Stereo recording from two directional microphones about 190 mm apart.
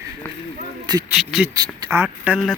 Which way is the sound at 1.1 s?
5° right (ahead or behind).